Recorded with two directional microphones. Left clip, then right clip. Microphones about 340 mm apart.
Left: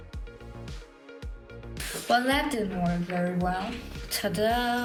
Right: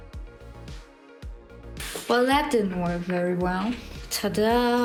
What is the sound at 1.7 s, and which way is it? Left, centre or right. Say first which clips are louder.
Music: right 2 dB; centre.